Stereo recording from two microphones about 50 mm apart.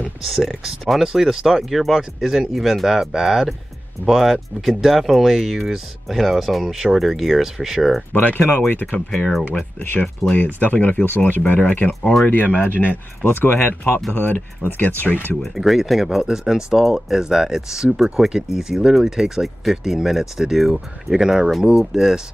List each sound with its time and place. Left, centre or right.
0.3 s speech: centre
8.1 s speech: left
10.3 s speech: left
12.0 s speech: centre
12.3 s speech: left
15.4 s speech: centre